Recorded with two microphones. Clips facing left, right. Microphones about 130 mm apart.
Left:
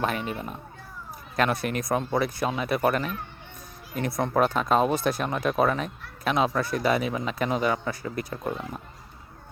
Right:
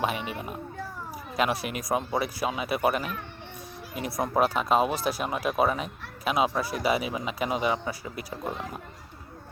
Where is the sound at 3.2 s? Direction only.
75° right (ahead or behind).